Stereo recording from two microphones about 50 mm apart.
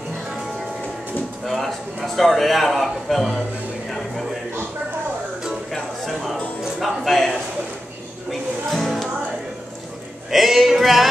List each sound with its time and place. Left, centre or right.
1.4 s a man's voice: centre
3.9 s music: centre
5.7 s music: centre
6.8 s a sound: centre
8.3 s music: centre
10.3 s a man's voice: centre